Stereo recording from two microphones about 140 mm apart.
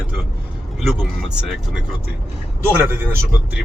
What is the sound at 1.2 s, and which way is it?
Speech, 5° right (ahead or behind).